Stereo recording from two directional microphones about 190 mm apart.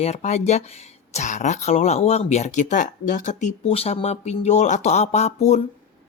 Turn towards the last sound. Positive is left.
turn(degrees=35)  # may be behind; listen again after turning